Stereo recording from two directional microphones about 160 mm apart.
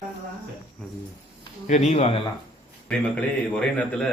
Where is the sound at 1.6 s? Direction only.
45° left (ahead or behind).